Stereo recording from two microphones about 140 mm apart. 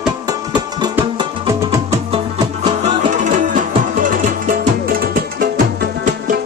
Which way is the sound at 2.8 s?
65° right (ahead or behind).